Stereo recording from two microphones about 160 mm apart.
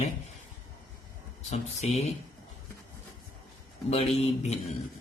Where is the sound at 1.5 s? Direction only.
45° left (ahead or behind).